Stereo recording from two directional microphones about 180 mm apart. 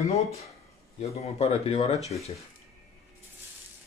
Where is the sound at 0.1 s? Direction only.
35° left (ahead or behind).